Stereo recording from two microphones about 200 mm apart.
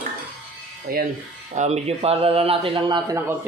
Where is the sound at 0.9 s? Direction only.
50° right (ahead or behind).